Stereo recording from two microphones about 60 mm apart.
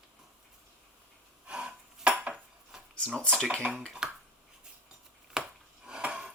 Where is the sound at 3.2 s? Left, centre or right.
Centre.